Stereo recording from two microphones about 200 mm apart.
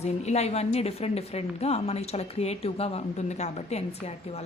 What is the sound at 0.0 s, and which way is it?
A woman's voice, 35° left (ahead or behind).